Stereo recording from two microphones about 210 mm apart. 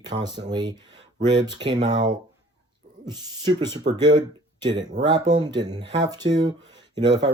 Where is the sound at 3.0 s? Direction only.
20° right (ahead or behind).